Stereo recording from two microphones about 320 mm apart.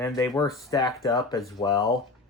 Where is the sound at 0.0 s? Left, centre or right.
Centre.